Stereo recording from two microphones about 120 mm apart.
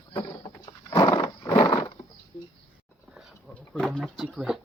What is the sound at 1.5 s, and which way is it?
Horse, 45° left (ahead or behind).